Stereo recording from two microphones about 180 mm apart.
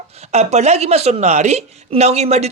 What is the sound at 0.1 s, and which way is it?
Speech, 35° right (ahead or behind).